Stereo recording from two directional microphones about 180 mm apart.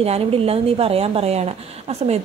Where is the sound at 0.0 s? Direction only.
35° right (ahead or behind).